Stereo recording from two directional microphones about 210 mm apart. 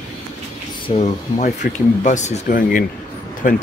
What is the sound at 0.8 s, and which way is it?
Speech, 30° left (ahead or behind).